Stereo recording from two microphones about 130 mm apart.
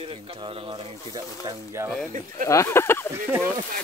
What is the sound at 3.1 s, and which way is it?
Speech, 15° right (ahead or behind).